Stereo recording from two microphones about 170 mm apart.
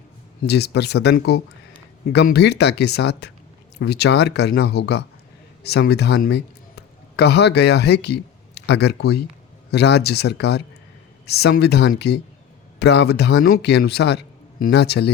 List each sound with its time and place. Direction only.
0.4 s speech: 75° left (ahead or behind)